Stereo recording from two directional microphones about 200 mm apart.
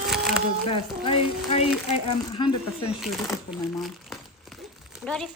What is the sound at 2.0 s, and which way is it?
Speech, 30° left (ahead or behind).